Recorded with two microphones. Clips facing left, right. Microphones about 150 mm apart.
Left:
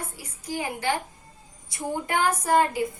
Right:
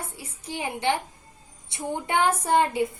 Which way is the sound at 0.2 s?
25° right (ahead or behind).